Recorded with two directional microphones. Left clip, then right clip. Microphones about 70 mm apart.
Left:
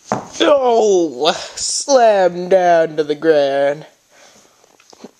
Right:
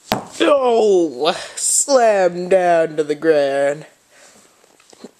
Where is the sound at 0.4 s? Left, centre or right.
Right.